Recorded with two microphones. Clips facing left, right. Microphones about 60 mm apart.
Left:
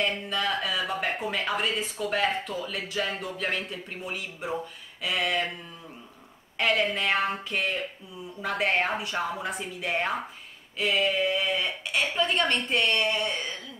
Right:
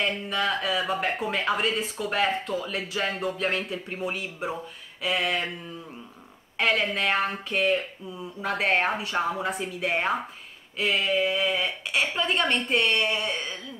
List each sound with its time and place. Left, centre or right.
0.0 s a woman's voice: centre
0.6 s a woman's voice: centre
1.6 s a sound: centre
2.0 s a woman's voice: centre
4.0 s a woman's voice: centre
5.0 s a sound: centre
6.9 s a sound: centre
8.4 s a woman's voice: centre
9.8 s a woman's voice: centre